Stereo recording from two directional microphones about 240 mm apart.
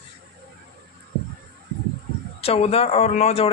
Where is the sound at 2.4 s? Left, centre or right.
Left.